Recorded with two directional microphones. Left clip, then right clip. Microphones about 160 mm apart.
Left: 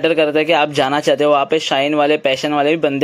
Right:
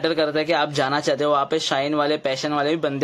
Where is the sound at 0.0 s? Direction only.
20° left (ahead or behind).